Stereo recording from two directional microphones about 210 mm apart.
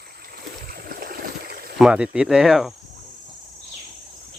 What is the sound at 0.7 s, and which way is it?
Stream, 45° right (ahead or behind).